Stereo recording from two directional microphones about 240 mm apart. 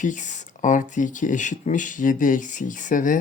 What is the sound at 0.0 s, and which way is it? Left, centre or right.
Speech, left.